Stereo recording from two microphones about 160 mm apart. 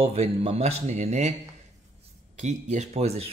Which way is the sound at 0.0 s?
40° right (ahead or behind).